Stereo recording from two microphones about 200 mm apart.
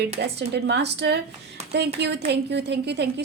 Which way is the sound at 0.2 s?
50° right (ahead or behind).